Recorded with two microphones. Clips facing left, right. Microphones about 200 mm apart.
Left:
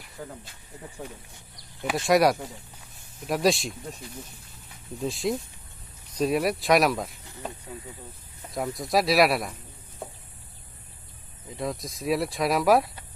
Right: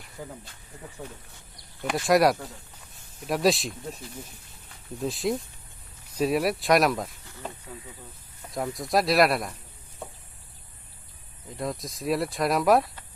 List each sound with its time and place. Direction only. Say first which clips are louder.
0.2 s speech: even; 10° right (ahead or behind)
1.8 s speech: even; centre (ahead or behind)
4.9 s speech: even; centre (ahead or behind)
8.5 s speech: even; centre (ahead or behind)
11.5 s speech: left 1 dB; centre (ahead or behind)